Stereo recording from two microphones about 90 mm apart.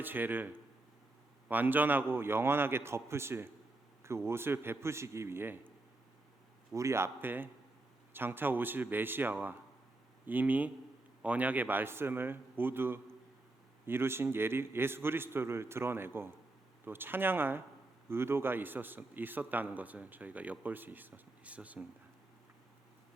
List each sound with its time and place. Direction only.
0.0 s a man's voice: 20° right (ahead or behind)
6.7 s a man's voice: 30° right (ahead or behind); by 21.8 s 15° right (ahead or behind)